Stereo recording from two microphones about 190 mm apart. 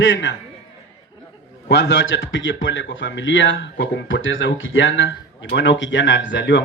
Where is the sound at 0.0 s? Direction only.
75° left (ahead or behind).